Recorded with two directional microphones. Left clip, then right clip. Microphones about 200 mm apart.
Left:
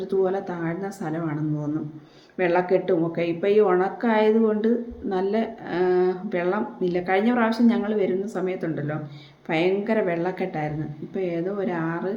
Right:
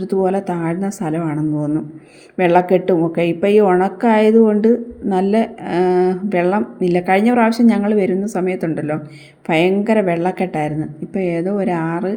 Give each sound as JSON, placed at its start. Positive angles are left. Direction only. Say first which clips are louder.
{"t": 0.0, "sound": "a woman's voice", "louder": "right 6 dB", "side_deg": -40}